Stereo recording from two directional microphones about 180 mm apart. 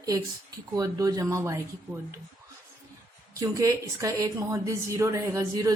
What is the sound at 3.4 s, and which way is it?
A woman's voice, 20° right (ahead or behind).